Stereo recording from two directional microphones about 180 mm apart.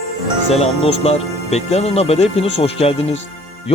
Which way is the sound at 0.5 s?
35° left (ahead or behind).